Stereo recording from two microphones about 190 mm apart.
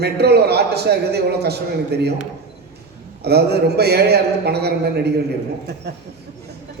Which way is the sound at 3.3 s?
60° right (ahead or behind).